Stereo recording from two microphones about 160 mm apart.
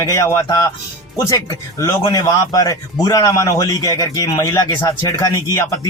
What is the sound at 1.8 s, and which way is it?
Speech, 20° left (ahead or behind).